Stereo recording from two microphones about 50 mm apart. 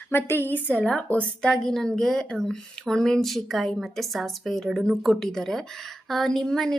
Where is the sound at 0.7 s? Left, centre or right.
Left.